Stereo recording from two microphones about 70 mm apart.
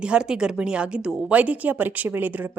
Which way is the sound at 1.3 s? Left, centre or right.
Centre.